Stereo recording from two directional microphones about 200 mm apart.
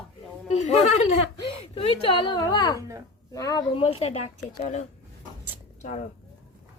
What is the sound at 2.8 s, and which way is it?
Speech, 15° right (ahead or behind).